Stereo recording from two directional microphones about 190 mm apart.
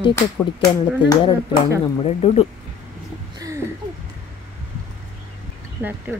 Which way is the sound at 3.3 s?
15° right (ahead or behind).